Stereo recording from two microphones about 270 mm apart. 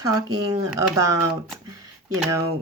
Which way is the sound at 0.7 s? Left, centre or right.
Centre.